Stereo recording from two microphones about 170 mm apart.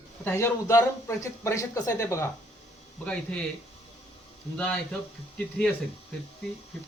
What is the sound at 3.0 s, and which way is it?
Speech, 5° left (ahead or behind).